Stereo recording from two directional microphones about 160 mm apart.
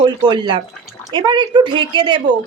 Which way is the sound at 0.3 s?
30° right (ahead or behind).